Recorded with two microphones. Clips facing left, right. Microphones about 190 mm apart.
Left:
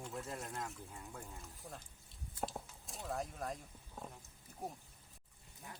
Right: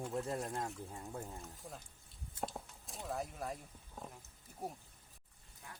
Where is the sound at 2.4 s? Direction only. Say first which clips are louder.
Even; centre (ahead or behind).